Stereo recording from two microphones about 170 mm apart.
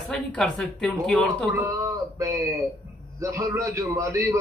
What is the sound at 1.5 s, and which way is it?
A man's voice, 15° right (ahead or behind).